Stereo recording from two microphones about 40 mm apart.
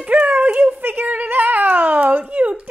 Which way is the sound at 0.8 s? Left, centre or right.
Right.